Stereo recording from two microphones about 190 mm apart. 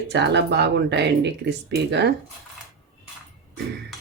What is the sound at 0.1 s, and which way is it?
Speech, 65° right (ahead or behind).